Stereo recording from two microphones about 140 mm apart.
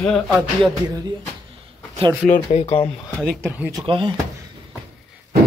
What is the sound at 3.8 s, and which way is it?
Speech, 40° right (ahead or behind).